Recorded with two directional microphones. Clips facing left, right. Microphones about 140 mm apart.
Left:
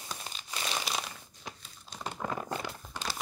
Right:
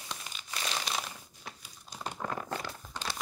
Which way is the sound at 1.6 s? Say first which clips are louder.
Right 1 dB; 10° right (ahead or behind).